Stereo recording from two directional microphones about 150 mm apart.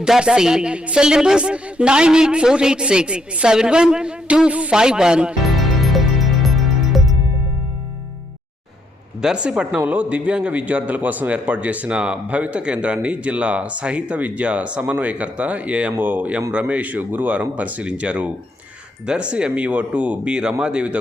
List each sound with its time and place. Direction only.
0.0 s speech: 5° right (ahead or behind)
9.2 s a man's voice: 5° right (ahead or behind)